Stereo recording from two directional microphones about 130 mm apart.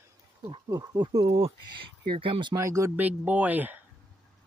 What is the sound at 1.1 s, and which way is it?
Speech, 45° right (ahead or behind).